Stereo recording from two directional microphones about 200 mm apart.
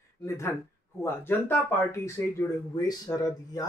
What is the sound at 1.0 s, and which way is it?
Speech, 10° left (ahead or behind).